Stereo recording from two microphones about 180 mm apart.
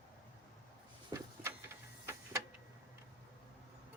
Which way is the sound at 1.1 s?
20° right (ahead or behind).